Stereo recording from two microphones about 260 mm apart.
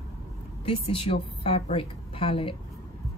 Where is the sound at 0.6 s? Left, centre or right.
Left.